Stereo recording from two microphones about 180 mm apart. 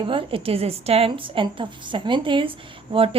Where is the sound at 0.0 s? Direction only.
30° right (ahead or behind).